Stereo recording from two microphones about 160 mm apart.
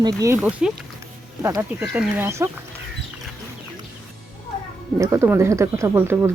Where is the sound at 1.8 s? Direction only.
10° right (ahead or behind).